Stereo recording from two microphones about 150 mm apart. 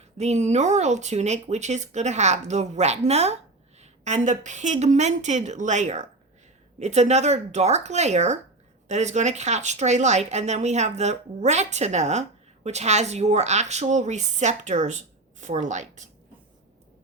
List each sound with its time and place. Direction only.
0.2 s a woman's voice: 45° right (ahead or behind)